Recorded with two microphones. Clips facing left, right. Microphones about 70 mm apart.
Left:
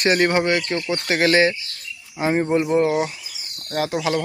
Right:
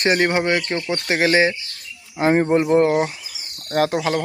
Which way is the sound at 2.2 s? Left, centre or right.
Right.